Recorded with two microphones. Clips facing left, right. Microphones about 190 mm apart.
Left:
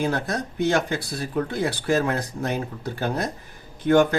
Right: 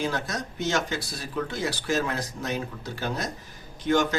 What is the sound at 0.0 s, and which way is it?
A man's voice, 55° left (ahead or behind).